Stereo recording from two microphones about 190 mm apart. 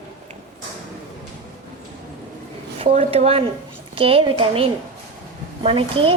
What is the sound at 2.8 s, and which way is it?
A woman's voice, 30° right (ahead or behind).